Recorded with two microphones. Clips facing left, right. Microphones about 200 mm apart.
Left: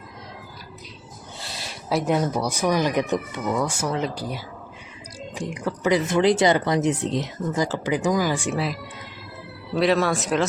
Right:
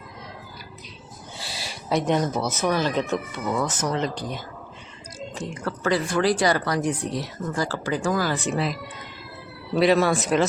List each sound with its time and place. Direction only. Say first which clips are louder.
1.4 s speech: right 1 dB; 5° right (ahead or behind)